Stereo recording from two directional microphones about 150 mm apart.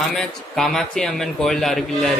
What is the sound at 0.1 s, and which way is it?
A man's voice, 5° left (ahead or behind).